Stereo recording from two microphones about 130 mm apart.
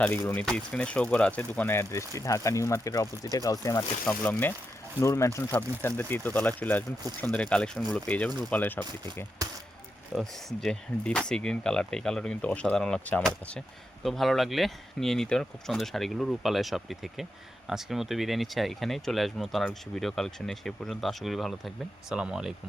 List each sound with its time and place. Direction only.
0.3 s speech: 5° left (ahead or behind); by 3.8 s 25° left (ahead or behind)
4.0 s speech: 10° left (ahead or behind)
10.2 s speech: 5° left (ahead or behind)